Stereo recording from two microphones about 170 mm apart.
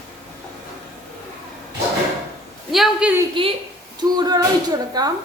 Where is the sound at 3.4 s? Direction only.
30° right (ahead or behind).